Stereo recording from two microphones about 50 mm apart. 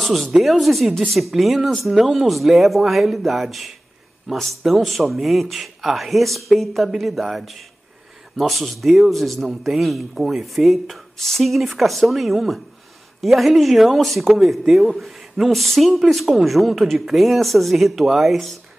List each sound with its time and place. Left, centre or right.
0.0 s speech: centre